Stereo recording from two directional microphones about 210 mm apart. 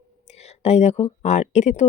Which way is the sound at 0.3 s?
30° left (ahead or behind).